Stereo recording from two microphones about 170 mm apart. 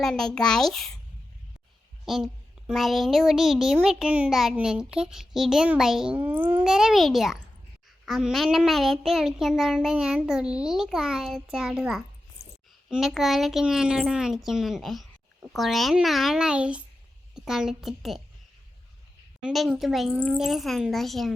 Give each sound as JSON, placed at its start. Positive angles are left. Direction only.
{"t": 0.0, "sound": "a child's voice", "side_deg": 5}
{"t": 2.0, "sound": "a child's voice", "side_deg": -5}
{"t": 12.4, "sound": "a sound", "side_deg": 40}
{"t": 12.9, "sound": "a child's voice", "side_deg": 0}
{"t": 19.4, "sound": "a child's voice", "side_deg": -5}